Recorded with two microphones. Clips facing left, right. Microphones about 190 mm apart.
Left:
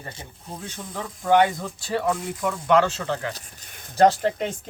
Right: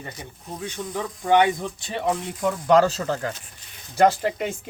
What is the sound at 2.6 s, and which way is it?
Speech, 35° right (ahead or behind).